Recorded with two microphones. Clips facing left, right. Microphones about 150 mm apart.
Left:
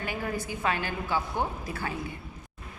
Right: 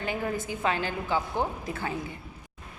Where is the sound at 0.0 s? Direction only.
20° right (ahead or behind).